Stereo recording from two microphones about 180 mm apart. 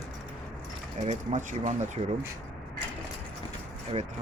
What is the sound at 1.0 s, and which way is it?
Speech, 40° right (ahead or behind).